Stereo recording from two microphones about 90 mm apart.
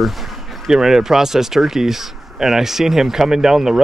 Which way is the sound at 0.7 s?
5° right (ahead or behind).